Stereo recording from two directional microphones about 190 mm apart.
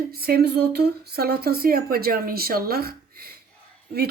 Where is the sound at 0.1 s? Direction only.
55° right (ahead or behind).